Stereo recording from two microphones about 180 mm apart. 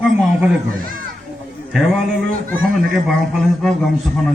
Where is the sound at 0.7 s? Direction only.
50° right (ahead or behind).